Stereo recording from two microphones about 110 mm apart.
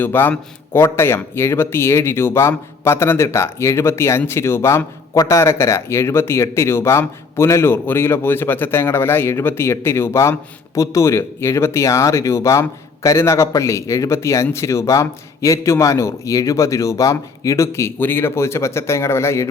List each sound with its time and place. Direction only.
0.0 s speech: 20° left (ahead or behind)